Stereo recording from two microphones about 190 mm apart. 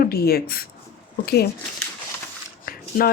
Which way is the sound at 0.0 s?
55° left (ahead or behind).